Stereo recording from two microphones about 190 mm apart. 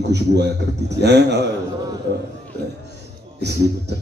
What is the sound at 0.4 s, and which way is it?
A man's voice, 60° right (ahead or behind).